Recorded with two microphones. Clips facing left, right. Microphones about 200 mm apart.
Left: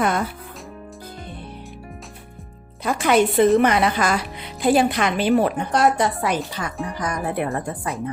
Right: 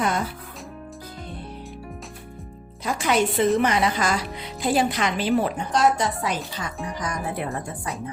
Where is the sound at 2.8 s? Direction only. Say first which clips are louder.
Left 4 dB; 60° left (ahead or behind).